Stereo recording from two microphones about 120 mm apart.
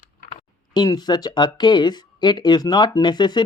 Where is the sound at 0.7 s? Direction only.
35° left (ahead or behind).